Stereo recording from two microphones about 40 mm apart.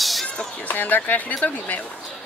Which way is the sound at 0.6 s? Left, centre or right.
Left.